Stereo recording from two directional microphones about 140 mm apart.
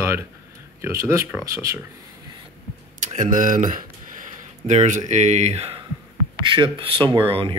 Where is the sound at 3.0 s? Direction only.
60° right (ahead or behind).